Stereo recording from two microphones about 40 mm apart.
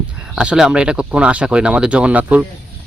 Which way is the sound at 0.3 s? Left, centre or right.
Centre.